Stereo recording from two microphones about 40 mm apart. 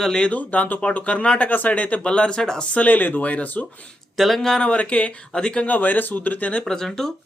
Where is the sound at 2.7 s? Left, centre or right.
Left.